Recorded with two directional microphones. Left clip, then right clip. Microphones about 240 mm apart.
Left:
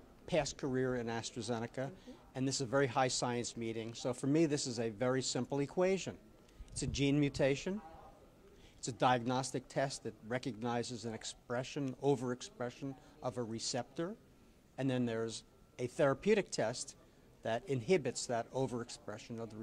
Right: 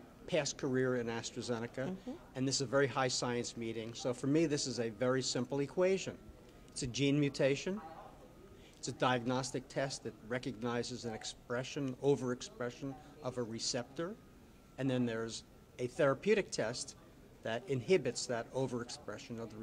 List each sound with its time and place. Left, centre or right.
0.3 s speech: left
8.8 s speech: left